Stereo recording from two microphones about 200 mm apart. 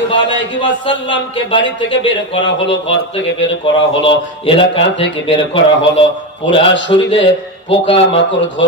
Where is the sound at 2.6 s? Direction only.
65° left (ahead or behind).